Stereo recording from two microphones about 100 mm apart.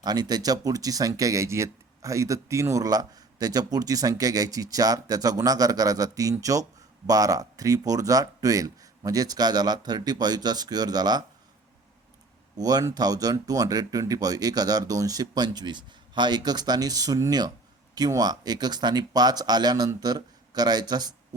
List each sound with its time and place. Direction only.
0.0 s speech: 40° right (ahead or behind)
12.5 s speech: 40° right (ahead or behind)